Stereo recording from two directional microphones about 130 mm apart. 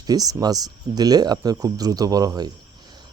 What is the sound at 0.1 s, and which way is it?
Speech, 30° right (ahead or behind).